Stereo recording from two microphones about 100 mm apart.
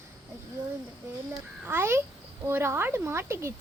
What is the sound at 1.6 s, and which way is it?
A child's voice, 25° right (ahead or behind).